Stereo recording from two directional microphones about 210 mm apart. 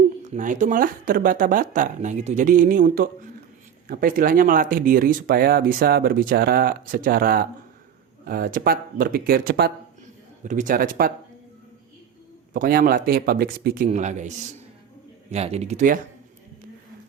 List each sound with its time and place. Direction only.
0.3 s speech: 35° right (ahead or behind)
12.5 s speech: 40° right (ahead or behind)